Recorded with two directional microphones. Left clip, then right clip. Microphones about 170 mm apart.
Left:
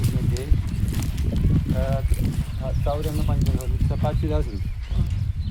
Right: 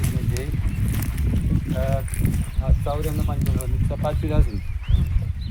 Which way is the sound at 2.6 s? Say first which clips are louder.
Left 1 dB; 30° right (ahead or behind).